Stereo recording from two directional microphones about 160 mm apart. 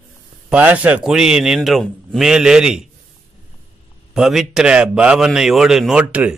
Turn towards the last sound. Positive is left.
turn(degrees=-10)  # may be behind; listen again after turning